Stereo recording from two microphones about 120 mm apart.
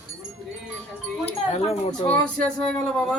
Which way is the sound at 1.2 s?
60° left (ahead or behind).